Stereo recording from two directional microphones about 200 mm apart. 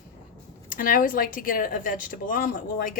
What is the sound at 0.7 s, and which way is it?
A woman's voice, 45° left (ahead or behind).